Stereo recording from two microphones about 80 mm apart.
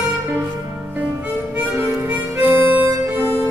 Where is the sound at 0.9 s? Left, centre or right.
Right.